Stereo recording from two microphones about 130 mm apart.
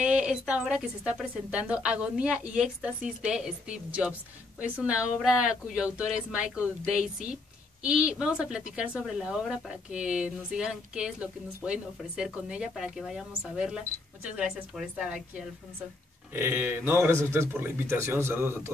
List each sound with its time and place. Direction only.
0.0 s a woman's voice: 10° right (ahead or behind)
7.8 s a woman's voice: 5° right (ahead or behind)
16.3 s a woman's voice: 15° right (ahead or behind)